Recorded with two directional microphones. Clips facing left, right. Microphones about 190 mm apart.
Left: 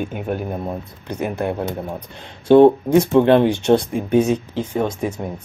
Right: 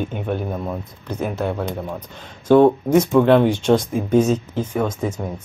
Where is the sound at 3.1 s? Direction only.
20° left (ahead or behind).